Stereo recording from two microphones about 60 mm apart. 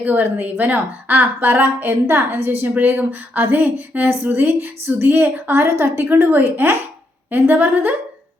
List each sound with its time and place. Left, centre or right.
0.0 s a woman's voice: right
2.7 s a woman's voice: right